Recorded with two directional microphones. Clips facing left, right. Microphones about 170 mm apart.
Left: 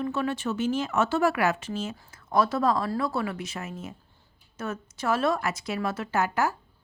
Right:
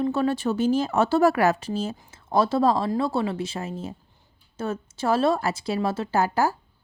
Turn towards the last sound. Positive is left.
turn(degrees=-30)  # may be behind; listen again after turning